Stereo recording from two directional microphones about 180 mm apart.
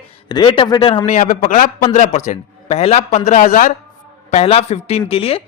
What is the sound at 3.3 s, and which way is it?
Speech, 45° left (ahead or behind).